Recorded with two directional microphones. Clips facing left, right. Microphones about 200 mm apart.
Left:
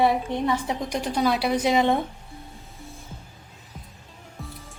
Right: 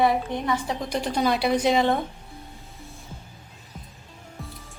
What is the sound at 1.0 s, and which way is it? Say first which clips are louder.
Speech: even; 5° left (ahead or behind).